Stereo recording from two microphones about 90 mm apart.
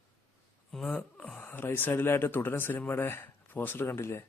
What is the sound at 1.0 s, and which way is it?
Speech, 15° left (ahead or behind).